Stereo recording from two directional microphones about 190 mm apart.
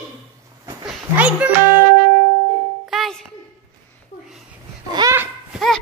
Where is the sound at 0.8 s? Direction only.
5° right (ahead or behind).